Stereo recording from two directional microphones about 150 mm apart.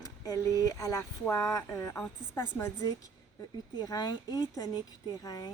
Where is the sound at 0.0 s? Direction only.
25° left (ahead or behind).